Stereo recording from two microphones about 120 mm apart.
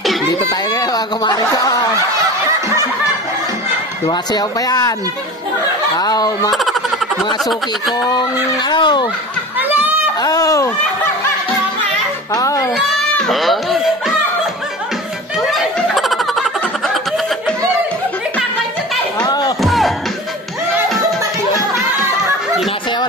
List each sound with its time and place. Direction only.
0.3 s speech: 35° left (ahead or behind)
4.1 s speech: 35° left (ahead or behind)
5.9 s speech: 35° left (ahead or behind)
6.5 s a sound: centre (ahead or behind)
7.3 s speech: centre (ahead or behind)
7.9 s speech: 35° left (ahead or behind)
9.6 s a sound: 15° right (ahead or behind)
10.2 s speech: 30° left (ahead or behind)
12.3 s speech: 30° left (ahead or behind)
12.7 s a sound: centre (ahead or behind)
15.3 s snicker: centre (ahead or behind)
19.2 s music: 35° left (ahead or behind)
19.6 s music: centre (ahead or behind)